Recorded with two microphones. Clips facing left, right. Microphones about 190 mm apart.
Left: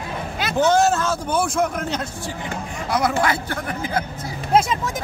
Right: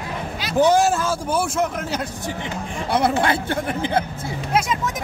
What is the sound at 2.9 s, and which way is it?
Speech, 30° right (ahead or behind).